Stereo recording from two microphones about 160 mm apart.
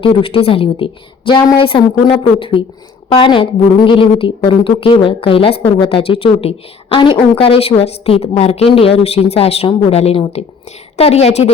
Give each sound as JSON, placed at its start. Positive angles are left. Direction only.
{"t": 0.0, "sound": "a woman's voice", "side_deg": 35}